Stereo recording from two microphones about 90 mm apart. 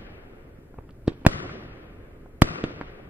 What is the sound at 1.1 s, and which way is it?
Fireworks, 20° right (ahead or behind).